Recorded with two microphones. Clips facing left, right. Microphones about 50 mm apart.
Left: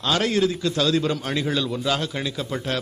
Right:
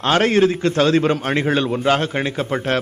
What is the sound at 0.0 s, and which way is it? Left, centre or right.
A man's voice, right.